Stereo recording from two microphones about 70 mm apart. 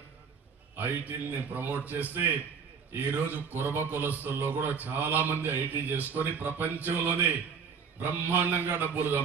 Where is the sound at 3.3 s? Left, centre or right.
Right.